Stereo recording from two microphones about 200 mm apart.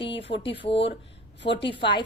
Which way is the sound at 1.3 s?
60° left (ahead or behind).